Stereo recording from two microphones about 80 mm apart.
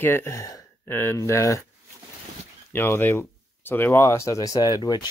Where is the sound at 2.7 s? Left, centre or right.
Left.